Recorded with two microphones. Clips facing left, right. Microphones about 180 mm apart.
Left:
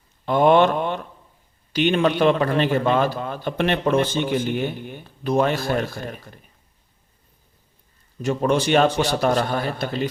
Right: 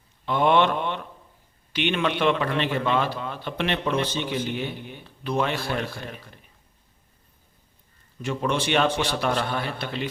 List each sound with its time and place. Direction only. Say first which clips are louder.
0.3 s a man's voice: left 5 dB; 45° left (ahead or behind)
8.2 s a man's voice: left 6 dB; 40° left (ahead or behind)